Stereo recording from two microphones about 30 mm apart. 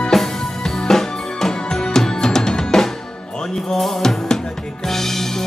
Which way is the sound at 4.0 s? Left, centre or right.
Centre.